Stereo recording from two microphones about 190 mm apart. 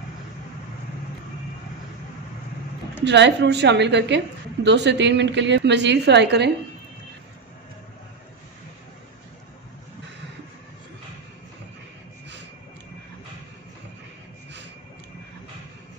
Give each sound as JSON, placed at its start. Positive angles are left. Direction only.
{"t": 3.1, "sound": "a woman's voice", "side_deg": -65}